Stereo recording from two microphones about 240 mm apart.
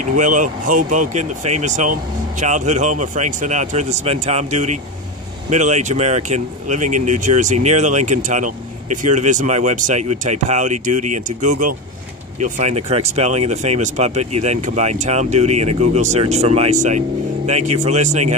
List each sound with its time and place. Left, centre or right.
0.0 s speech: right